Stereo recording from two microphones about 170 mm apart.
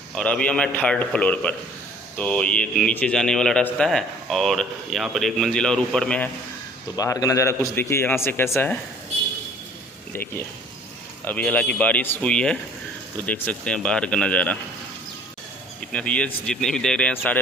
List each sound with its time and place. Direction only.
0.1 s a man's voice: 5° left (ahead or behind)
6.9 s a man's voice: 20° left (ahead or behind)
10.1 s a man's voice: 10° left (ahead or behind)
15.9 s a man's voice: 5° left (ahead or behind)